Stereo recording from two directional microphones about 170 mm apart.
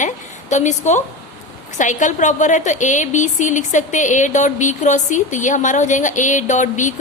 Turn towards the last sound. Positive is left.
turn(degrees=45)  # may be behind; listen again after turning